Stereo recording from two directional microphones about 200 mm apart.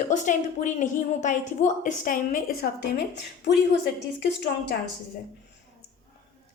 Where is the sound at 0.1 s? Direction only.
40° left (ahead or behind); by 3.6 s 55° left (ahead or behind).